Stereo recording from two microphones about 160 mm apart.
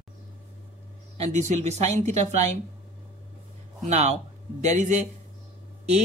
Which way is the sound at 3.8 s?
45° right (ahead or behind).